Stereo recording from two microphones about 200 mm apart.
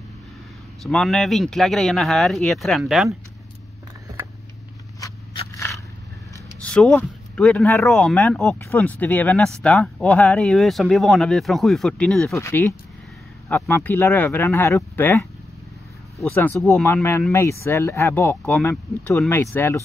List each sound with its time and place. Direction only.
0.8 s speech: centre (ahead or behind)
5.0 s scissors: 15° left (ahead or behind)
6.6 s speech: 5° left (ahead or behind)
12.4 s speech: 15° left (ahead or behind)
16.3 s speech: 15° left (ahead or behind)